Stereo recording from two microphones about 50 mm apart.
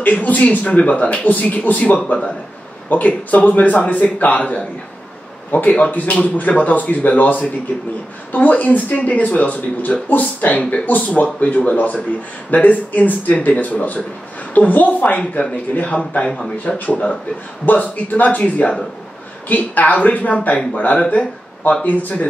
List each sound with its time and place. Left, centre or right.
0.0 s a man's voice: left